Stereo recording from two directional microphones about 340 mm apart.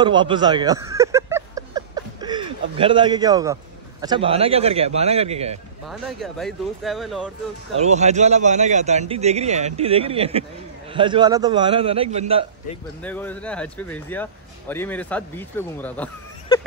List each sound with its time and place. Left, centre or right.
0.0 s a sound: centre
4.0 s a man's voice: centre
5.9 s speech: centre
7.7 s a man's voice: centre
13.0 s speech: centre